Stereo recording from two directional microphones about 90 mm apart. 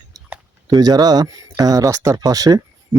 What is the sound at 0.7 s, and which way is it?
Speech, 45° right (ahead or behind).